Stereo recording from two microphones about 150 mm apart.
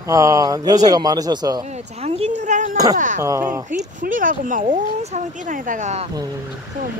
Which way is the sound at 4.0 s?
65° right (ahead or behind).